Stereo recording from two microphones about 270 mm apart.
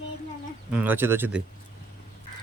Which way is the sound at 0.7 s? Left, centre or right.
Centre.